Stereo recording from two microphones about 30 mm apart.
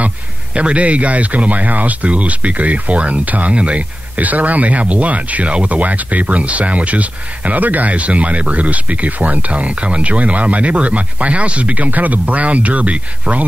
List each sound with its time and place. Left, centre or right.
0.6 s speech: right
4.2 s speech: right
5.5 s speech: right
5.8 s speech: right
7.9 s speech: right